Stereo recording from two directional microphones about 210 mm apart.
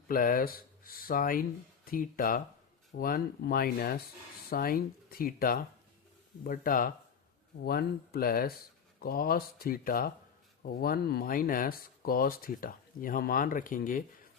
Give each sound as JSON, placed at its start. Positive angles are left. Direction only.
{"t": 0.1, "sound": "speech", "side_deg": 40}